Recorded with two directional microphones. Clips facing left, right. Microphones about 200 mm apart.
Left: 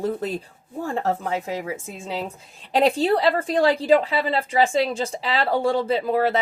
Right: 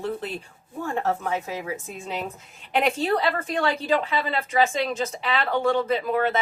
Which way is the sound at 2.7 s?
30° left (ahead or behind).